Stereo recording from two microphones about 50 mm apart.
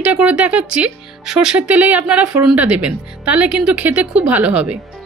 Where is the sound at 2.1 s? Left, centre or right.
Centre.